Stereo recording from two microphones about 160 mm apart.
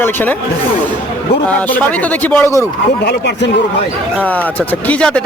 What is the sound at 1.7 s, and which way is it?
Speech, 10° left (ahead or behind).